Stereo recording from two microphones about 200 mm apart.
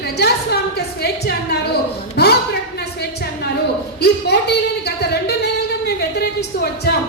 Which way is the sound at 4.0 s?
55° left (ahead or behind).